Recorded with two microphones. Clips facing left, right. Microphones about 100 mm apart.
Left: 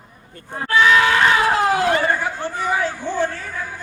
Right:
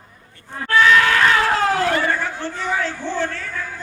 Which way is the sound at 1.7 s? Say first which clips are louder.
Left 1 dB; 15° left (ahead or behind).